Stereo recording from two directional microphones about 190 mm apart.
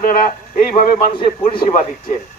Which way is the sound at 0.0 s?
45° left (ahead or behind).